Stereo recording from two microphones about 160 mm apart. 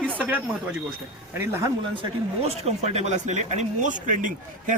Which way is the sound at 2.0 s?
40° right (ahead or behind).